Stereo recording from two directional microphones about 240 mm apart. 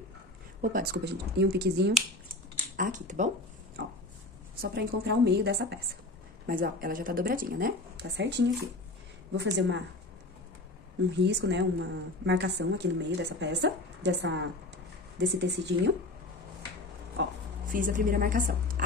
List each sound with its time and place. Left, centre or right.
0.6 s a woman's voice: right
4.6 s a woman's voice: right
11.1 s a woman's voice: right
17.2 s a woman's voice: right